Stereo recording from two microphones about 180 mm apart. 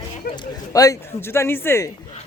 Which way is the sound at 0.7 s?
20° left (ahead or behind).